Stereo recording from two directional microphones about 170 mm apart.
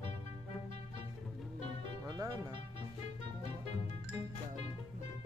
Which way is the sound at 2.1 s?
25° right (ahead or behind).